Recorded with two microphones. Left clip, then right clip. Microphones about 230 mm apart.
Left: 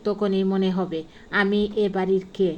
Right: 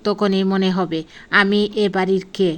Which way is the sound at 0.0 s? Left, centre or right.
Right.